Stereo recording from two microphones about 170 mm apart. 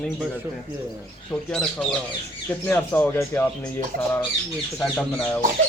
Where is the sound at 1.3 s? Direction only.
5° left (ahead or behind).